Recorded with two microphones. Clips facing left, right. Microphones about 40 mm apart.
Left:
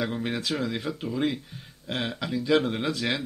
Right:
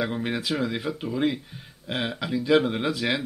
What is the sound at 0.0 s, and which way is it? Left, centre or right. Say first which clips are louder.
Speech: right 2 dB; centre.